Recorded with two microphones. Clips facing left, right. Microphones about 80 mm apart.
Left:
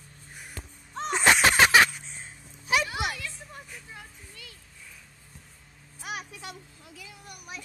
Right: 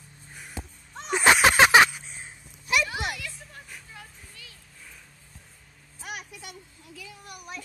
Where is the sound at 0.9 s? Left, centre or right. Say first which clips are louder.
Right 2 dB; centre.